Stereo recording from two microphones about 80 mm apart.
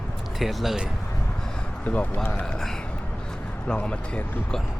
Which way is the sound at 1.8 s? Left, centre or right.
Centre.